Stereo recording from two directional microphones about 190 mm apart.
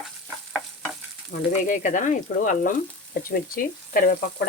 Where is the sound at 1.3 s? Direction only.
40° left (ahead or behind).